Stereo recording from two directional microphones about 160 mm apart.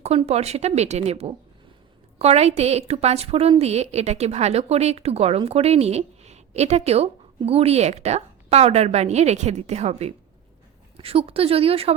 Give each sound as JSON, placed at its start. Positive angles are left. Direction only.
{"t": 0.0, "sound": "a woman's voice", "side_deg": -40}